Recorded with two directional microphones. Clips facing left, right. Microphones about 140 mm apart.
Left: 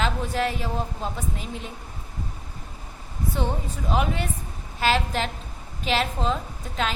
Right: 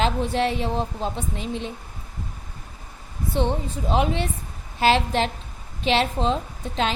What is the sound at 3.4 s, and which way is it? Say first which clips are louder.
A woman's voice: right 6 dB; 30° right (ahead or behind).